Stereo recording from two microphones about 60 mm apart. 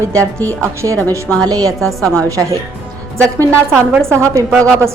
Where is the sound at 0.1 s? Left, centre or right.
Right.